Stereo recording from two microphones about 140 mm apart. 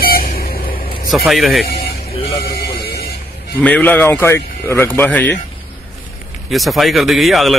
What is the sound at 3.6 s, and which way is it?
Speech, 10° left (ahead or behind).